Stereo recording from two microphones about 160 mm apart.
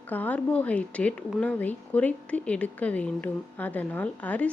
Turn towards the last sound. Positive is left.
turn(degrees=10)  # may be behind; listen again after turning